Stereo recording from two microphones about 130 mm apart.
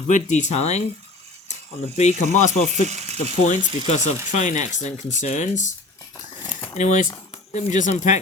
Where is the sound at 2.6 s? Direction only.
60° right (ahead or behind).